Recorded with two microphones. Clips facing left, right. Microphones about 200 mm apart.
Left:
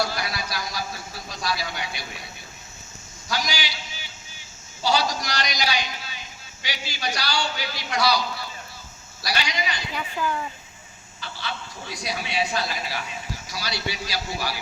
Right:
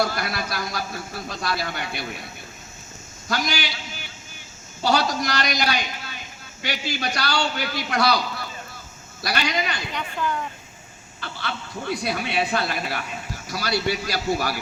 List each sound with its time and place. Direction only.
0.0 s speech: 55° right (ahead or behind)
3.2 s a man's voice: 55° right (ahead or behind)
9.9 s speech: 5° left (ahead or behind)
11.2 s speech: 55° right (ahead or behind)